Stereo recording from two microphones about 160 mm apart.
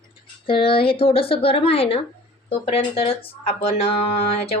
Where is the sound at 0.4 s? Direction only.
35° left (ahead or behind).